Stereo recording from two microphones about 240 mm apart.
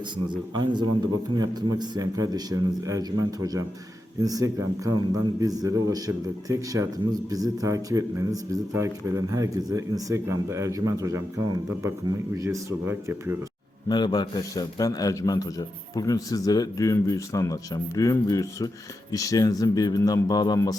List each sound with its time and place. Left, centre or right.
0.3 s a man's voice: centre
13.8 s a man's voice: centre